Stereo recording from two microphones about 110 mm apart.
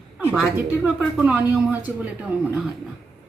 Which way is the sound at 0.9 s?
10° right (ahead or behind).